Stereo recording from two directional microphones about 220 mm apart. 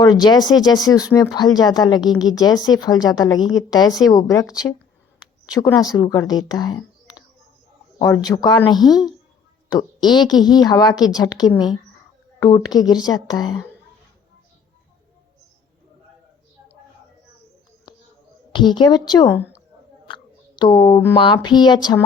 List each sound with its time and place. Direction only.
0.0 s speech: 20° left (ahead or behind)
5.5 s speech: 15° left (ahead or behind)
8.9 s a woman's voice: centre (ahead or behind)
10.1 s speech: 20° left (ahead or behind)
18.5 s speech: 20° left (ahead or behind)
20.1 s a sound: 20° left (ahead or behind)
21.2 s speech: 20° left (ahead or behind)